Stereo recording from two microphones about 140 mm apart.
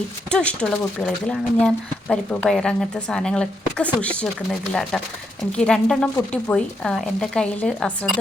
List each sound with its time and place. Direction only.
0.3 s speech: 5° left (ahead or behind)